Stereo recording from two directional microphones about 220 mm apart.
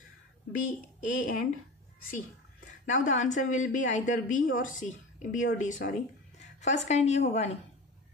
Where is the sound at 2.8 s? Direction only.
35° left (ahead or behind).